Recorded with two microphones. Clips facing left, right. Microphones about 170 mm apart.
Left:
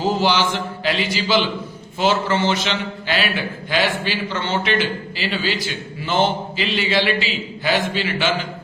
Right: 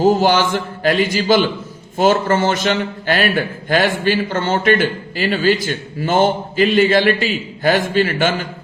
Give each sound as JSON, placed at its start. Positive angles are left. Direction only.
{"t": 0.0, "sound": "a man's voice", "side_deg": -50}